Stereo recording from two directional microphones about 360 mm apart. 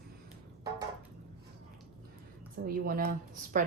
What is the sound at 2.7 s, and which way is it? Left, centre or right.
Speech, right.